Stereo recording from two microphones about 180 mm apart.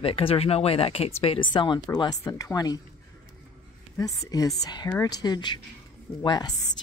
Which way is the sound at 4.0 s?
20° left (ahead or behind).